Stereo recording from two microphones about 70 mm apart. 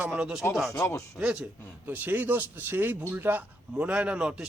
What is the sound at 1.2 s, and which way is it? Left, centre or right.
Speech, centre.